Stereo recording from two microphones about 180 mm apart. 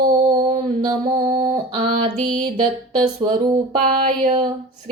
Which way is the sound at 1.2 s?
45° right (ahead or behind).